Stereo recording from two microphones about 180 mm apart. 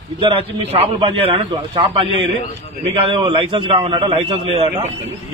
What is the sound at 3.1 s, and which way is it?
A man's voice, 30° right (ahead or behind).